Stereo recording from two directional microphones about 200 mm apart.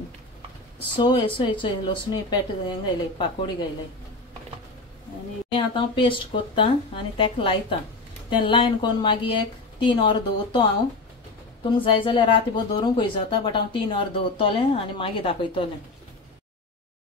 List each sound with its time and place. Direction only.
0.9 s speech: 25° left (ahead or behind)
5.5 s speech: 25° left (ahead or behind)
11.7 s speech: 25° left (ahead or behind)